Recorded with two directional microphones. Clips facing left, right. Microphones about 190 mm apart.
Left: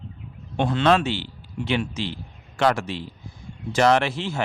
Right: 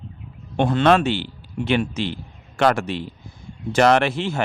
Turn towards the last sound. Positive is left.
turn(degrees=-55)  # may be behind; listen again after turning